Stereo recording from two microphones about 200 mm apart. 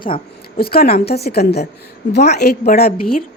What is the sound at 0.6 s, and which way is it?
A woman's voice, 50° left (ahead or behind).